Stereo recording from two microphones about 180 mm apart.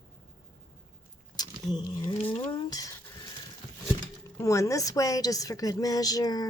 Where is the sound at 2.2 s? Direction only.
30° left (ahead or behind).